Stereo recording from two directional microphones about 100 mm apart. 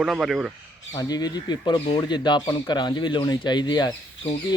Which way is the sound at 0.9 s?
40° left (ahead or behind).